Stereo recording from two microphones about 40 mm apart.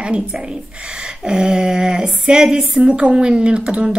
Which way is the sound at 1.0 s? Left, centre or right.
Right.